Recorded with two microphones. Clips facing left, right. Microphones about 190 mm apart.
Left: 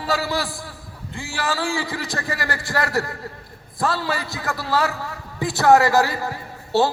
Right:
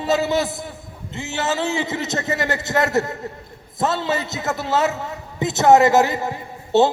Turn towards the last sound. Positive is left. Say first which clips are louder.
# right 3 dB
turn(degrees=-20)  # may be behind; listen again after turning